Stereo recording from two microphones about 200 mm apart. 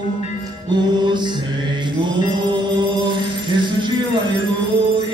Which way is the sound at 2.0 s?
20° right (ahead or behind).